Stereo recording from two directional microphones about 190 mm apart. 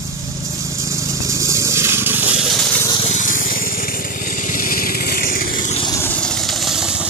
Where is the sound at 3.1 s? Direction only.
45° left (ahead or behind).